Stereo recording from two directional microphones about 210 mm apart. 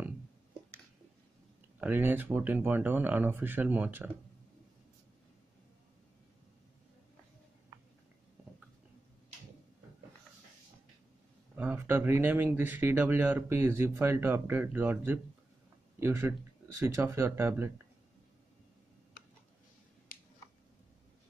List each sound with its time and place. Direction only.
1.8 s speech: 10° right (ahead or behind)
11.5 s speech: 10° right (ahead or behind)
20.1 s a sound: 45° left (ahead or behind)